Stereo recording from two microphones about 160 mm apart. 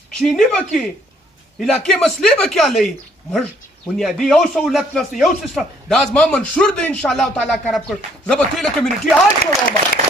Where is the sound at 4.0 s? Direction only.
Centre (ahead or behind).